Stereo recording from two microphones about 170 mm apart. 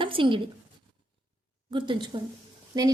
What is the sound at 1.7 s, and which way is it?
Speech, 30° right (ahead or behind).